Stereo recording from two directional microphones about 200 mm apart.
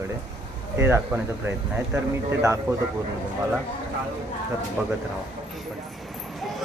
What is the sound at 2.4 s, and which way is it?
Speech, 15° right (ahead or behind).